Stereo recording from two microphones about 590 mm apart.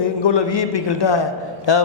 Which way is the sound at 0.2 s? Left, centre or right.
Left.